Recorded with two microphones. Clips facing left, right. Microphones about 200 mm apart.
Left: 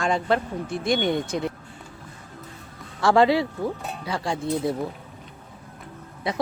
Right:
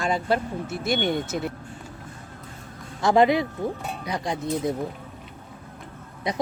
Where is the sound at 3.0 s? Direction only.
20° right (ahead or behind).